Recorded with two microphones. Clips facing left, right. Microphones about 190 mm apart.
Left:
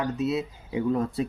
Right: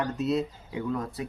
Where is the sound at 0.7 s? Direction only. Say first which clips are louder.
Left 6 dB; 25° left (ahead or behind).